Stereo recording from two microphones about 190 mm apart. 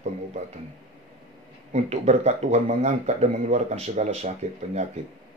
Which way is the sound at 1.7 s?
35° right (ahead or behind).